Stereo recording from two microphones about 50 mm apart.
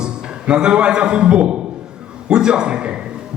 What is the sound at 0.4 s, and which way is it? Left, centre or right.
A man's voice, centre.